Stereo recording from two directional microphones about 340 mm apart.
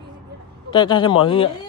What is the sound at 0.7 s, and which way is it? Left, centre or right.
Speech, centre.